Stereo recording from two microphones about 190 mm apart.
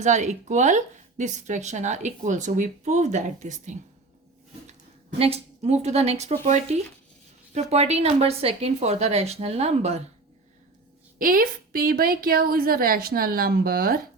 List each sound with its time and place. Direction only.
0.0 s speech: 40° right (ahead or behind)
5.2 s speech: 35° right (ahead or behind)
11.2 s a woman's voice: 50° right (ahead or behind)